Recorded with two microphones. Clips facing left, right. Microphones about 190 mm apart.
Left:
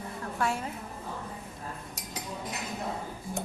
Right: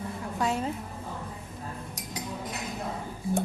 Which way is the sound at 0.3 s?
20° right (ahead or behind).